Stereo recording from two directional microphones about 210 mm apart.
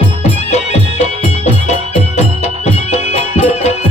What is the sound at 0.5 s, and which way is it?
Music, 30° left (ahead or behind).